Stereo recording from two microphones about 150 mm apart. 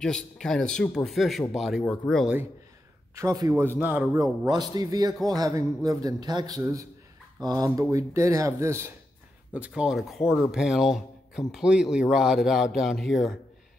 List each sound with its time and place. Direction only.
0.0 s speech: 5° left (ahead or behind)
3.2 s a man's voice: 20° right (ahead or behind)
4.2 s a man's voice: 25° right (ahead or behind)
9.5 s speech: 10° right (ahead or behind)